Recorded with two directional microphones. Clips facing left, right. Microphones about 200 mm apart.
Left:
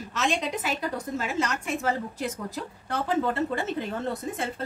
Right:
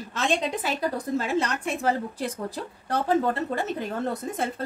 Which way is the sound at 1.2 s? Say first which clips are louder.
Right 1 dB; 35° right (ahead or behind).